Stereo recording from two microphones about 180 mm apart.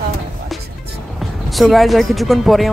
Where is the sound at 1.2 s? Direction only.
Centre (ahead or behind).